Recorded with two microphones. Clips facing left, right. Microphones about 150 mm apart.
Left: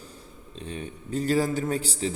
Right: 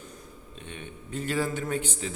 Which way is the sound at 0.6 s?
35° left (ahead or behind).